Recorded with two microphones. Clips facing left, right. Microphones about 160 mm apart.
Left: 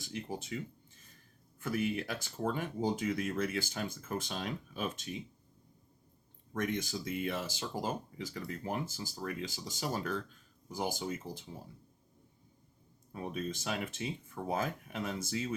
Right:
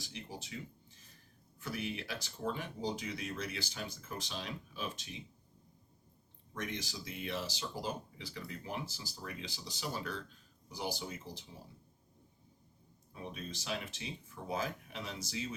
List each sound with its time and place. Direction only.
0.0 s speech: 50° left (ahead or behind)
1.6 s speech: 50° left (ahead or behind)
6.5 s speech: 50° left (ahead or behind)
13.3 s speech: 50° left (ahead or behind)